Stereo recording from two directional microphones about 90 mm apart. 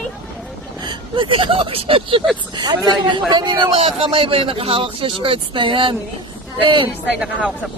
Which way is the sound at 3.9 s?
90° right.